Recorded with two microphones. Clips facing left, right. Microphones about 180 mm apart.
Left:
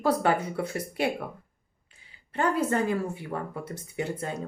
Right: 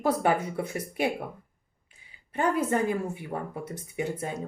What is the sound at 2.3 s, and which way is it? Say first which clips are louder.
Speech: even; 15° right (ahead or behind).